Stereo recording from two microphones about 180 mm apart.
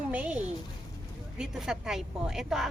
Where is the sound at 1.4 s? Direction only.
5° right (ahead or behind).